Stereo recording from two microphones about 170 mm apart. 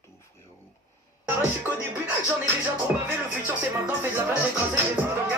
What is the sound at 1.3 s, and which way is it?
Music, 15° right (ahead or behind).